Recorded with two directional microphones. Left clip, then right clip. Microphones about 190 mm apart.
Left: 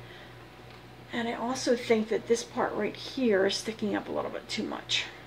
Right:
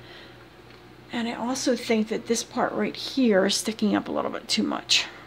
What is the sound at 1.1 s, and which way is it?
Speech, 55° right (ahead or behind).